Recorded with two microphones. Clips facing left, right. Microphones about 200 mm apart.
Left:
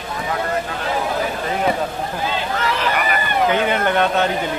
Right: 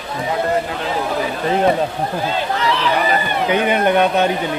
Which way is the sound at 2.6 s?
45° left (ahead or behind).